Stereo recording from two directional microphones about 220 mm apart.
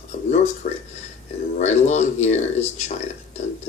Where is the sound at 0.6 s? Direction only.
35° left (ahead or behind).